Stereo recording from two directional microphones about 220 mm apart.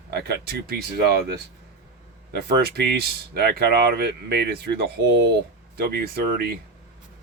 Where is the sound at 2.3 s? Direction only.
45° right (ahead or behind).